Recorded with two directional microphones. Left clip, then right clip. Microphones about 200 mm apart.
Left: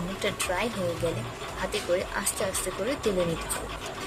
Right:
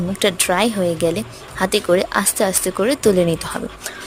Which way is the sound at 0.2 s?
55° right (ahead or behind).